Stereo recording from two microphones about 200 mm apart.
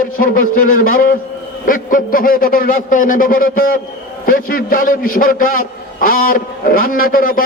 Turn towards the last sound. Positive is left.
turn(degrees=45)  # may be behind; listen again after turning